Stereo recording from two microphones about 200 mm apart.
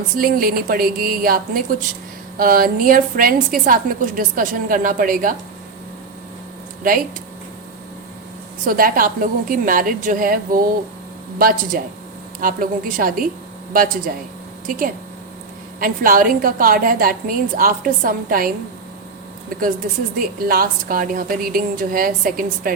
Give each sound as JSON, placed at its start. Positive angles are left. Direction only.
{"t": 0.2, "sound": "a woman's voice", "side_deg": -45}
{"t": 8.6, "sound": "a woman's voice", "side_deg": -45}